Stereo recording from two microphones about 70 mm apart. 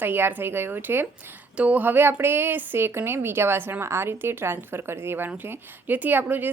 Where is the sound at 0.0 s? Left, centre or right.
Right.